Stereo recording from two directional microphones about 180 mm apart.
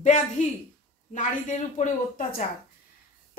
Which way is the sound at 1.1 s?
45° left (ahead or behind).